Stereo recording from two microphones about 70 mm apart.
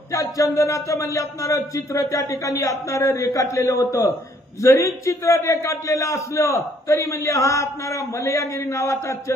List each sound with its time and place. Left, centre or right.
0.1 s a man's voice: left